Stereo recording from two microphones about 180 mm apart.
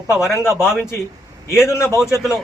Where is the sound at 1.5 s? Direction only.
15° left (ahead or behind).